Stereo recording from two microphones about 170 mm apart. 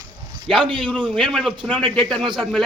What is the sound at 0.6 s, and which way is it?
Speech, 30° right (ahead or behind).